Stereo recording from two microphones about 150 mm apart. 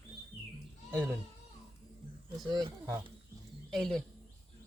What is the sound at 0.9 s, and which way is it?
Speech, 15° right (ahead or behind).